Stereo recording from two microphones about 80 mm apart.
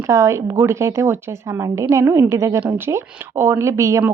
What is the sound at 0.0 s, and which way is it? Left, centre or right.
A woman's voice, right.